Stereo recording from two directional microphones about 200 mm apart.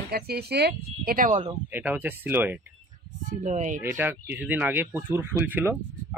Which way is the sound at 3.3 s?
35° right (ahead or behind).